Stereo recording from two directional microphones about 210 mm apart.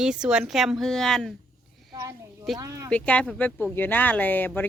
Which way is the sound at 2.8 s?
5° left (ahead or behind).